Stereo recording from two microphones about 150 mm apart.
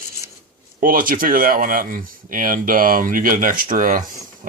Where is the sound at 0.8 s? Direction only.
70° right (ahead or behind).